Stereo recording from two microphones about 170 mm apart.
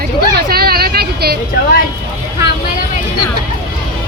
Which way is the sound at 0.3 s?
65° right (ahead or behind).